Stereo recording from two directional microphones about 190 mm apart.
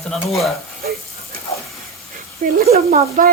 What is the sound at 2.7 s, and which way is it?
Speech, 40° right (ahead or behind).